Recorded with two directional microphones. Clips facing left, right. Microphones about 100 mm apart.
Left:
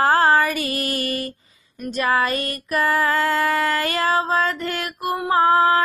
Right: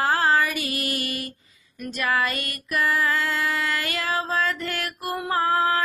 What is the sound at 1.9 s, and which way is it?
Female singing, 30° left (ahead or behind).